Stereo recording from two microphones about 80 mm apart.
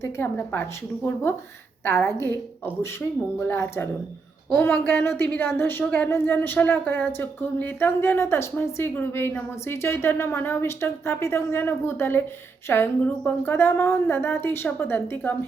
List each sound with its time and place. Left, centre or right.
0.3 s speech: left
3.4 s speech: left
5.8 s speech: centre
6.1 s speech: left